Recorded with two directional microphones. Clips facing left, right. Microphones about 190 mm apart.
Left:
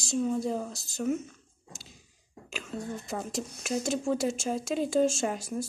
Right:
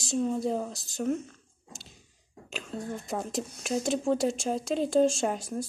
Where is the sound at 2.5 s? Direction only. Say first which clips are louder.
Right 1 dB; centre (ahead or behind).